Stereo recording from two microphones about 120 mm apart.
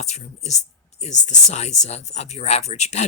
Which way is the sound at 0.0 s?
70° left (ahead or behind).